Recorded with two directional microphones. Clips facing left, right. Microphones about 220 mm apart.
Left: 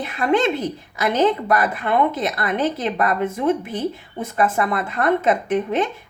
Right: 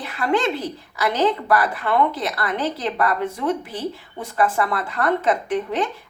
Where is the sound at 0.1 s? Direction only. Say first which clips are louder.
Left 2 dB; 20° left (ahead or behind).